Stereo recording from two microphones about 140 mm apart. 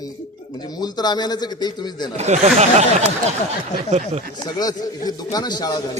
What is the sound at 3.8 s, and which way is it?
Speech, 50° right (ahead or behind).